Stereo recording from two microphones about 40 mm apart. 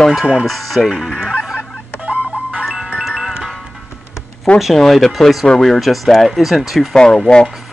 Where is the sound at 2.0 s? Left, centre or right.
Right.